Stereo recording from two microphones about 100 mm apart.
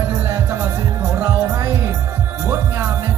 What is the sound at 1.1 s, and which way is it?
Speech, 20° right (ahead or behind).